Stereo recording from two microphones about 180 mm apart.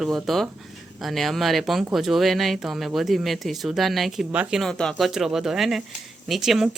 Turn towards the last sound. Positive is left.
turn(degrees=0)  # may be behind; listen again after turning